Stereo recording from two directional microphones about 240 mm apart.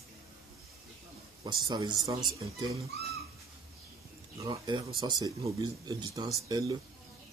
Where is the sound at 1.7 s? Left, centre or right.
Centre.